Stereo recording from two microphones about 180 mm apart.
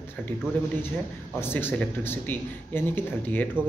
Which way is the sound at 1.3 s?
10° left (ahead or behind).